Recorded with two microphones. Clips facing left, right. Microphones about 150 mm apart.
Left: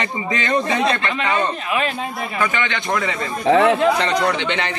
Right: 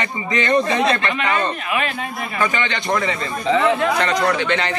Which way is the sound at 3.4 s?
60° left (ahead or behind).